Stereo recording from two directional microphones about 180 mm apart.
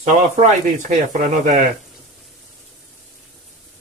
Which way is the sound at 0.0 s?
45° right (ahead or behind).